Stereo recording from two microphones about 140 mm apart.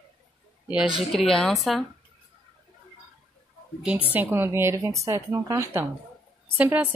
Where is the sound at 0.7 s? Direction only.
5° right (ahead or behind).